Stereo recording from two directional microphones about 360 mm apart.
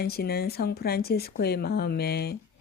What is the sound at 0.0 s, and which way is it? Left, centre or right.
Speech, left.